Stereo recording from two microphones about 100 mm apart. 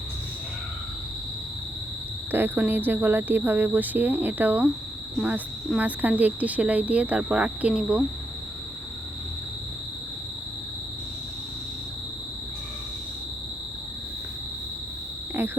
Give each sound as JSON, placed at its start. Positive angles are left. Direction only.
{"t": 2.3, "sound": "speech", "side_deg": -20}
{"t": 15.4, "sound": "speech", "side_deg": -25}